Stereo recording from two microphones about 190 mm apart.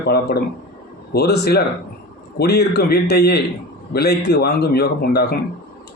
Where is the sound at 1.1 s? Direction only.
55° left (ahead or behind).